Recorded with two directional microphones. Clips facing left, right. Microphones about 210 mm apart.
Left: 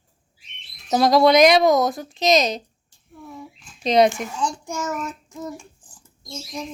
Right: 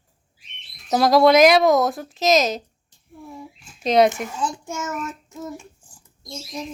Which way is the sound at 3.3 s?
5° right (ahead or behind).